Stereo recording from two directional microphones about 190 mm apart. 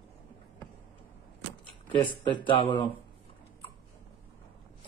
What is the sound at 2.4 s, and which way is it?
Speech, 30° left (ahead or behind).